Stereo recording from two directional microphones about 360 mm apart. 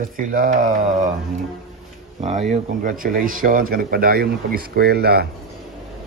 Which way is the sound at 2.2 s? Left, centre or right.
Centre.